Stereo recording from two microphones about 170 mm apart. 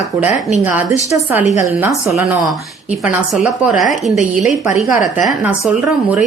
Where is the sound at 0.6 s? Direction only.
10° right (ahead or behind).